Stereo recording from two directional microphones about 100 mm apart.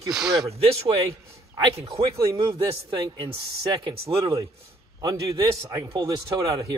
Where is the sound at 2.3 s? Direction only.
55° right (ahead or behind).